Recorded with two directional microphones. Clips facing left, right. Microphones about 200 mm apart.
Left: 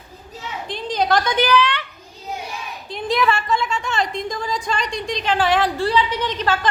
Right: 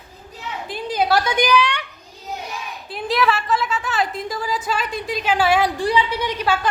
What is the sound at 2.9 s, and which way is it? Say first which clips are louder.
A woman's voice: even; 5° right (ahead or behind).